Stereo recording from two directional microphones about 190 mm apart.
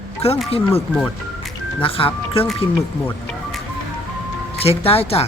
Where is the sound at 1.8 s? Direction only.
30° left (ahead or behind).